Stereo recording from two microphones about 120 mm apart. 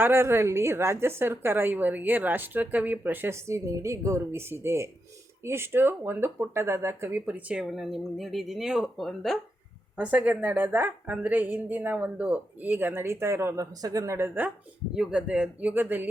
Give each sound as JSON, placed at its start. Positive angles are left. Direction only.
{"t": 0.0, "sound": "a woman's voice", "side_deg": -20}
{"t": 10.0, "sound": "a woman's voice", "side_deg": -10}
{"t": 14.9, "sound": "a woman's voice", "side_deg": -5}